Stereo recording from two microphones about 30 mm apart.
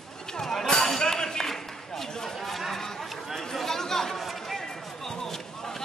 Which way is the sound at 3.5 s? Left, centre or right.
Centre.